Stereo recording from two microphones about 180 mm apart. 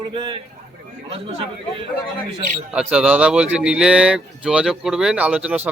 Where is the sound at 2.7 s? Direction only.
5° right (ahead or behind).